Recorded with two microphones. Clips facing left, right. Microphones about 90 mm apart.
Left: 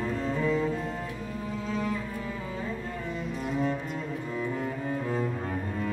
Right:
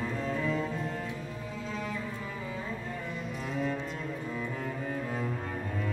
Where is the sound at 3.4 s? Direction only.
5° left (ahead or behind).